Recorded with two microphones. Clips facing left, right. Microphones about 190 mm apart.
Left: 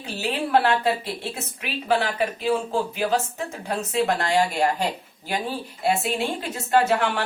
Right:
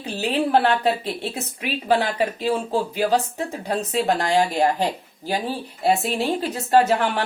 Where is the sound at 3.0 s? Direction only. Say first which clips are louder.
Right 3 dB; 35° right (ahead or behind).